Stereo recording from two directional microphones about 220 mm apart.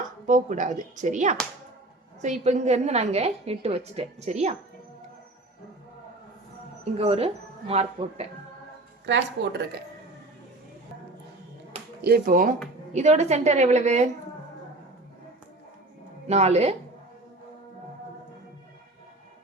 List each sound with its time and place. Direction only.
0.0 s a woman's voice: 35° right (ahead or behind)
7.0 s a woman's voice: 25° right (ahead or behind)
9.0 s a woman's voice: 55° right (ahead or behind)
12.0 s a woman's voice: 40° right (ahead or behind)
16.2 s a woman's voice: 30° right (ahead or behind)